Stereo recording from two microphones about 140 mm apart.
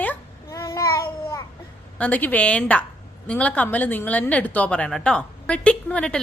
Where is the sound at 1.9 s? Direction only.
10° left (ahead or behind).